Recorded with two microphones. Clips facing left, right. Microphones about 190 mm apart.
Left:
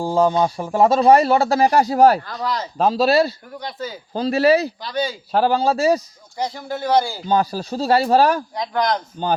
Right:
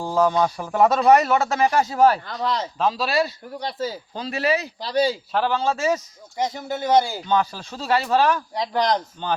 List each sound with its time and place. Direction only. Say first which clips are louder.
0.0 s speech: left 3 dB; 30° left (ahead or behind)
2.2 s speech: even; 25° right (ahead or behind)
2.7 s speech: left 8 dB; 40° left (ahead or behind)
3.6 s a man's voice: right 2 dB; 30° right (ahead or behind)
4.1 s speech: left 9 dB; 35° left (ahead or behind)
4.8 s a man's voice: right 3 dB; 30° right (ahead or behind)
5.3 s speech: left 5 dB; 40° left (ahead or behind)
6.3 s speech: even; 20° right (ahead or behind)
7.3 s speech: left 3 dB; 35° left (ahead or behind)
8.5 s a man's voice: left 1 dB; 35° right (ahead or behind)
9.2 s speech: left 5 dB; 40° left (ahead or behind)